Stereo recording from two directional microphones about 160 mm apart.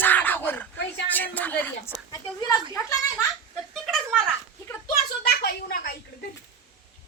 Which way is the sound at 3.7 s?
Centre (ahead or behind).